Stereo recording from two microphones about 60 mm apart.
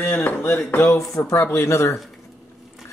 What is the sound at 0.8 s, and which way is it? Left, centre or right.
A man's voice, left.